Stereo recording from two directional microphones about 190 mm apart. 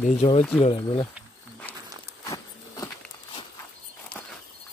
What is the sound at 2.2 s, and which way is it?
Walk, 15° left (ahead or behind).